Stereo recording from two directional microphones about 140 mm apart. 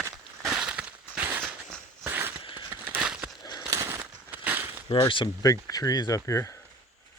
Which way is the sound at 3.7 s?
20° right (ahead or behind).